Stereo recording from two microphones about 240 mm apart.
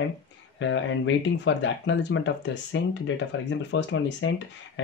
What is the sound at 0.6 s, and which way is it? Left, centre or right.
Speech, left.